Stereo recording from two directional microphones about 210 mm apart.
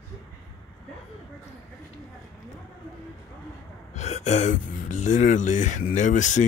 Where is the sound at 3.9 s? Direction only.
35° left (ahead or behind).